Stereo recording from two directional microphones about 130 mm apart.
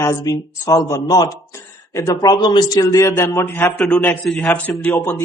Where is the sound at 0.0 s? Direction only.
25° left (ahead or behind).